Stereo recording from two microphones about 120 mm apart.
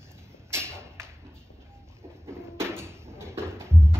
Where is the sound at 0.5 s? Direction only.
20° right (ahead or behind).